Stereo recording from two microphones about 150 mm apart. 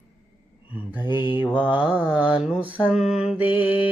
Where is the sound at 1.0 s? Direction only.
30° left (ahead or behind).